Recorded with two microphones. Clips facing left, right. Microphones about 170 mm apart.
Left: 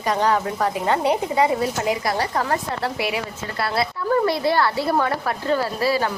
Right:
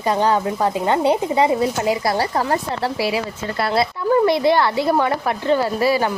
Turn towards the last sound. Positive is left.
turn(degrees=-20)  # may be behind; listen again after turning